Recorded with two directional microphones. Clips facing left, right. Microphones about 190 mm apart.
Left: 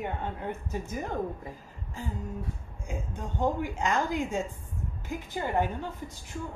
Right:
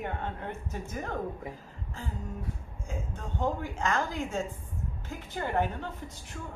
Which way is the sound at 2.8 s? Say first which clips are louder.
Left 2 dB; 15° left (ahead or behind).